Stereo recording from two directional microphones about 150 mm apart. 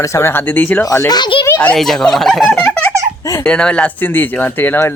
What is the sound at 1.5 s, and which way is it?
Speech, 10° left (ahead or behind).